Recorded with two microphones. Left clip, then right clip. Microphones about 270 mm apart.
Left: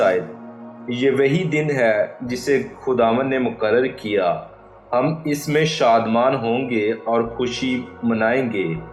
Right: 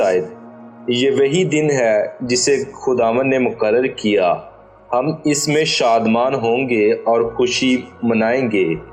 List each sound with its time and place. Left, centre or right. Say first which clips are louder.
0.9 s speech: right 3 dB; right